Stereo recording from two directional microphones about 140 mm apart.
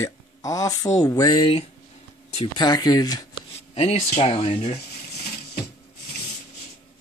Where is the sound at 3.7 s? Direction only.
50° left (ahead or behind).